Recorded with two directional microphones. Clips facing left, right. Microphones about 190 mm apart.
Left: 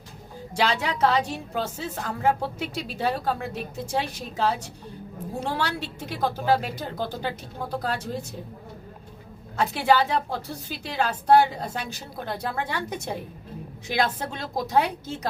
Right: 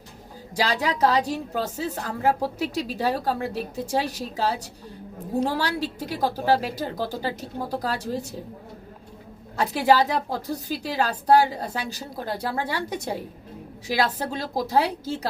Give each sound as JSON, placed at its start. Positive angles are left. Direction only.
{"t": 0.5, "sound": "a woman's voice", "side_deg": -35}
{"t": 9.6, "sound": "a woman's voice", "side_deg": -35}